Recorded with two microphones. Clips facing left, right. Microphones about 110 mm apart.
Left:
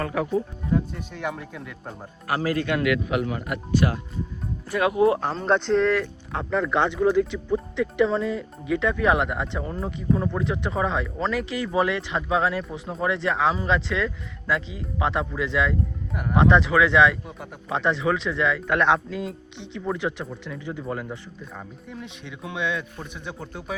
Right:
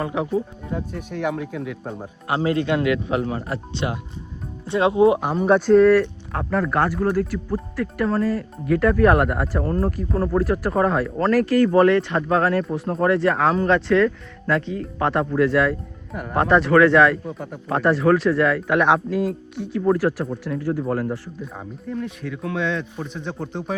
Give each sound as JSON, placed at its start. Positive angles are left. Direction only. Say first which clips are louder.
{"t": 0.0, "sound": "speech", "louder": "right 2 dB", "side_deg": -20}
{"t": 0.7, "sound": "speech", "louder": "left 4 dB", "side_deg": -5}
{"t": 2.2, "sound": "speech", "louder": "right 3 dB", "side_deg": -25}
{"t": 22.4, "sound": "speech", "louder": "right 3 dB", "side_deg": 10}